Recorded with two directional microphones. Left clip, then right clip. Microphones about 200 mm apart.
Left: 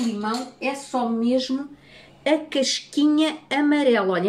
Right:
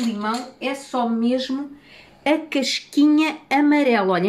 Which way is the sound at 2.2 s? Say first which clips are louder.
Right 1 dB; 35° right (ahead or behind).